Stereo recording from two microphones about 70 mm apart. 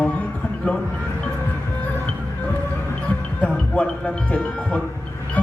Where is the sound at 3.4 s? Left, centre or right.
Centre.